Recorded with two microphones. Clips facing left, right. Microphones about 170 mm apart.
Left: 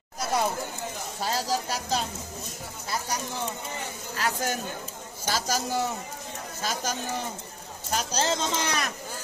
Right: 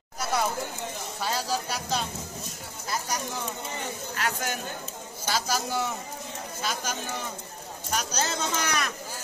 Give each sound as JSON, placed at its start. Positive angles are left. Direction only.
{"t": 1.2, "sound": "speech", "side_deg": 40}
{"t": 4.2, "sound": "speech", "side_deg": 40}
{"t": 7.9, "sound": "a man's voice", "side_deg": 30}